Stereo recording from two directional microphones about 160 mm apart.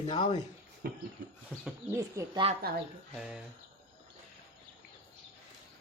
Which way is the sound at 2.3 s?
35° right (ahead or behind).